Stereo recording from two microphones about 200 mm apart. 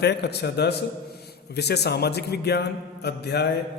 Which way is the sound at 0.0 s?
55° left (ahead or behind).